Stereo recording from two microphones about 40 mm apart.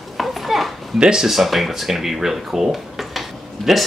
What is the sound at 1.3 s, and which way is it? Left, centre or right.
Speech, centre.